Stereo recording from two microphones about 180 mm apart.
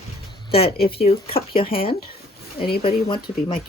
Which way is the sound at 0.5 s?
60° left (ahead or behind).